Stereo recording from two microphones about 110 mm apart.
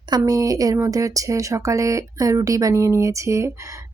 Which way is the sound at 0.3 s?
35° right (ahead or behind).